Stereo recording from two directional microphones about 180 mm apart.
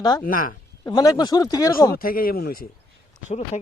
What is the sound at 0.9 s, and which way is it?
Speech, 20° left (ahead or behind).